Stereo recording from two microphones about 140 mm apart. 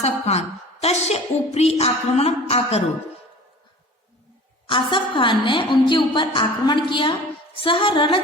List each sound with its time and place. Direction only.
0.0 s a woman's voice: 50° left (ahead or behind)
4.6 s a woman's voice: 35° left (ahead or behind)